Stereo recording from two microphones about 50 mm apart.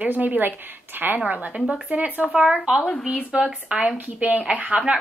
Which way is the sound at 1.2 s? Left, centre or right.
Right.